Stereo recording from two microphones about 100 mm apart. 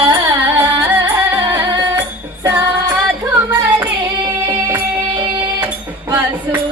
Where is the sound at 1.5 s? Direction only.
35° right (ahead or behind).